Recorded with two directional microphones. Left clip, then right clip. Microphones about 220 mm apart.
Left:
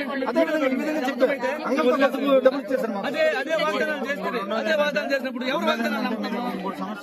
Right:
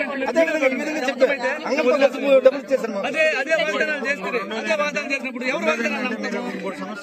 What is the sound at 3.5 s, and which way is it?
Speech, 15° left (ahead or behind).